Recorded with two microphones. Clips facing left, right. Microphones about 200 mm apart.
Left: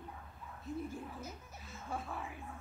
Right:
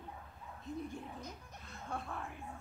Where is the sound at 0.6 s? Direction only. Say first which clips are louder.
Left 1 dB; centre (ahead or behind).